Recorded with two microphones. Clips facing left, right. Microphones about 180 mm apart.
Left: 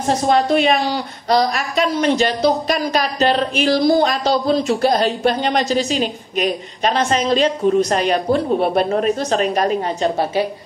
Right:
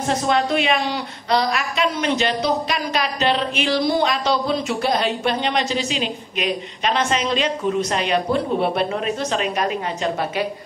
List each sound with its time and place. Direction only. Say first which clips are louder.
0.1 s a woman's voice: left 5 dB; 40° left (ahead or behind)